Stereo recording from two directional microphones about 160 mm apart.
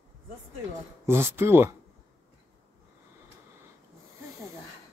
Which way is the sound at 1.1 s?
15° right (ahead or behind).